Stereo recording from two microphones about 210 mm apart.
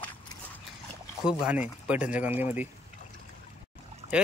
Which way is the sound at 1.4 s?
5° right (ahead or behind).